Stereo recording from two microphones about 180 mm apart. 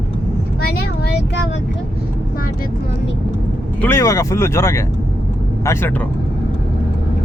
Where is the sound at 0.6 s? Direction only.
60° left (ahead or behind).